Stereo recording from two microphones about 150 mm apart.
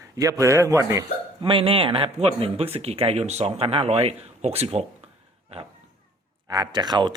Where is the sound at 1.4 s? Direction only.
35° right (ahead or behind).